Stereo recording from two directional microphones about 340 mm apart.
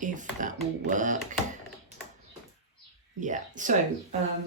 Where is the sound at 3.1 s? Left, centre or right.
Right.